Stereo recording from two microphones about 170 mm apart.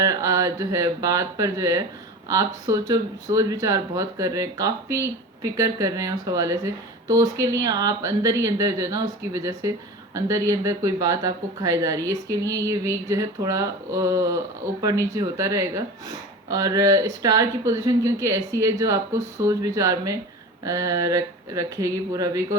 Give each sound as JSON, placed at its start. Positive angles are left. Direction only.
{"t": 0.0, "sound": "speech", "side_deg": -20}